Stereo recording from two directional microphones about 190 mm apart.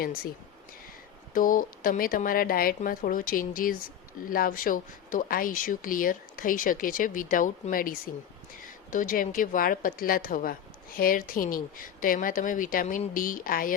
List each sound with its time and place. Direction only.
1.3 s a woman's voice: 45° left (ahead or behind)